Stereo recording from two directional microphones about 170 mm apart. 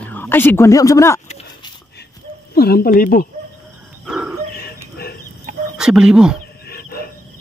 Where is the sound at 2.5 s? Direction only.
65° left (ahead or behind).